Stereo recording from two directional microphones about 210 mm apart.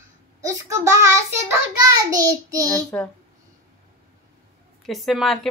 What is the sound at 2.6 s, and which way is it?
Speech, 5° left (ahead or behind).